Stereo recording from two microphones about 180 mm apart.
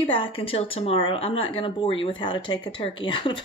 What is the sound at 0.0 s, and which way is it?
Speech, 30° left (ahead or behind).